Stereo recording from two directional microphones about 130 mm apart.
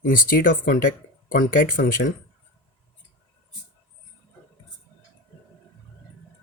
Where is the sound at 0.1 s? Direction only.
90° left.